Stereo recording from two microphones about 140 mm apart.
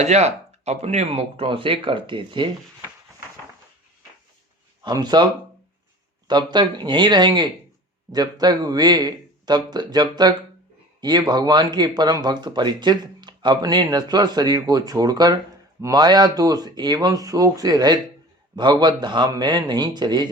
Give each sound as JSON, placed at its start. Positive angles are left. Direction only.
{"t": 0.0, "sound": "speech", "side_deg": -50}
{"t": 4.8, "sound": "a man's voice", "side_deg": -30}